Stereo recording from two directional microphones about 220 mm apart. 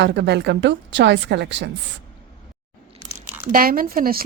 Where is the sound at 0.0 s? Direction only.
50° right (ahead or behind).